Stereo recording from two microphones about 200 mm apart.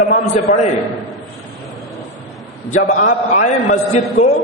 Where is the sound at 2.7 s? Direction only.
35° left (ahead or behind).